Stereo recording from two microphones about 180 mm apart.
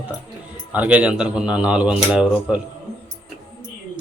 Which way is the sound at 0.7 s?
10° right (ahead or behind).